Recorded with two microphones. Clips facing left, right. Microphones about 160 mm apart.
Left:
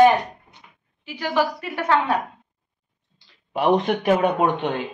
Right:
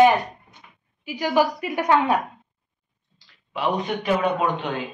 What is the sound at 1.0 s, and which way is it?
A woman's voice, 10° right (ahead or behind).